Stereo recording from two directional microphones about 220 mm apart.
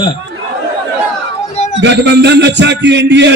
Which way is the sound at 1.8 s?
50° right (ahead or behind).